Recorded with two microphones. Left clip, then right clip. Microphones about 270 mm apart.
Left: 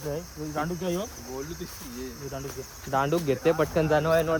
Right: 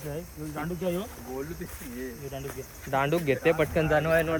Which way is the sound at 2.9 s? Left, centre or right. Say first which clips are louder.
Even; centre.